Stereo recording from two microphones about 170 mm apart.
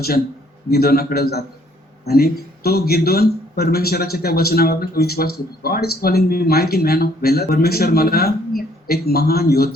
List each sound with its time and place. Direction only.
0.7 s speech: 65° left (ahead or behind)